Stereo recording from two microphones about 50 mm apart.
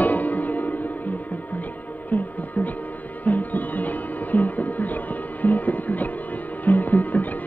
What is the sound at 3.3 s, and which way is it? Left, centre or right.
Music, left.